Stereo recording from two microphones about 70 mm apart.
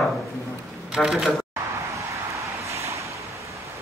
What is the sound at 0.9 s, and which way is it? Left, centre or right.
Speech, centre.